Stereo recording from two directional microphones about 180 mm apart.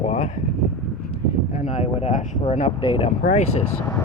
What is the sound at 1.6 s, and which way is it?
Speech, 40° left (ahead or behind).